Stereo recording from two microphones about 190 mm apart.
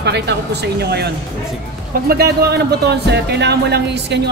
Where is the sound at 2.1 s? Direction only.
55° right (ahead or behind).